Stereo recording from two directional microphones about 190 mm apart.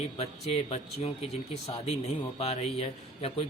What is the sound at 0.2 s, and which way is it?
A man's voice, 30° left (ahead or behind).